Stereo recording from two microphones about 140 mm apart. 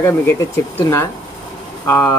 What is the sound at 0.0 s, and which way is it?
Speech, 15° left (ahead or behind).